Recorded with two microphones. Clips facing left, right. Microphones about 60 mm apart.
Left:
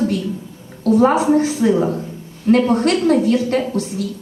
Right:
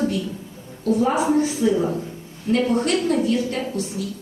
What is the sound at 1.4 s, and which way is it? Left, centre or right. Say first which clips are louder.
A woman's voice: left 4 dB; left.